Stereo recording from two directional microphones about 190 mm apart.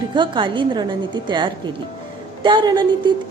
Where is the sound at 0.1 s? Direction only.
25° right (ahead or behind).